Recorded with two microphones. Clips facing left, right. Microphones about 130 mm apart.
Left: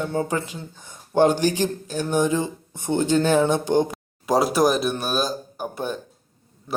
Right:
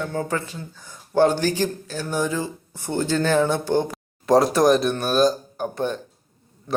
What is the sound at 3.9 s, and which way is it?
Speech, 5° left (ahead or behind).